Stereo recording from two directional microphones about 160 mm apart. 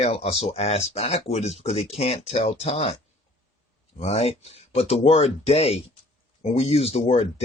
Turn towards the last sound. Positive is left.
turn(degrees=40)  # may be behind; listen again after turning